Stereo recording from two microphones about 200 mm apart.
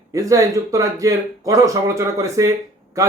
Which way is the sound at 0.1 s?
15° right (ahead or behind).